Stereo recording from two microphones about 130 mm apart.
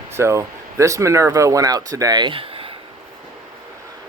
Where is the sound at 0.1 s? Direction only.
20° right (ahead or behind); by 2.7 s 45° right (ahead or behind).